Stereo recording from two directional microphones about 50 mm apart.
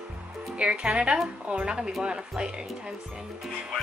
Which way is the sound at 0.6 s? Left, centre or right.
Right.